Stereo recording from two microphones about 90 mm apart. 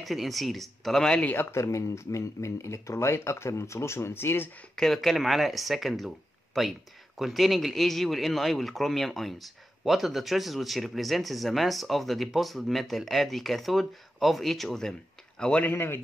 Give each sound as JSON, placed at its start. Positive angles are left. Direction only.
{"t": 0.0, "sound": "speech", "side_deg": 0}
{"t": 1.3, "sound": "speech", "side_deg": 25}
{"t": 1.6, "sound": "speech", "side_deg": 35}
{"t": 4.7, "sound": "speech", "side_deg": 5}
{"t": 15.7, "sound": "speech", "side_deg": 25}